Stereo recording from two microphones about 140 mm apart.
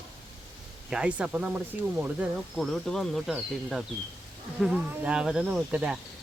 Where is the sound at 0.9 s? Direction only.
5° right (ahead or behind).